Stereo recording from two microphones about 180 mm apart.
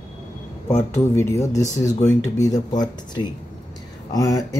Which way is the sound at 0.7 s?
15° left (ahead or behind).